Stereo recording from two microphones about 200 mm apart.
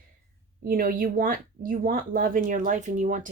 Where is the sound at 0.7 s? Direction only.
45° right (ahead or behind).